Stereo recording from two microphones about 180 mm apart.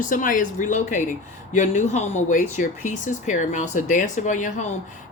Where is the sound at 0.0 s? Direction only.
50° left (ahead or behind).